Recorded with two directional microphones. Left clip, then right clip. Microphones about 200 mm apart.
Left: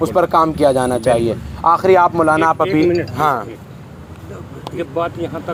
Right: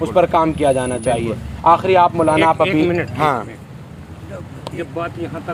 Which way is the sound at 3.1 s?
10° left (ahead or behind).